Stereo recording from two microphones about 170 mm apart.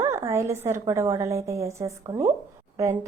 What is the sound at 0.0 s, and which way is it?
A woman's voice, 15° right (ahead or behind).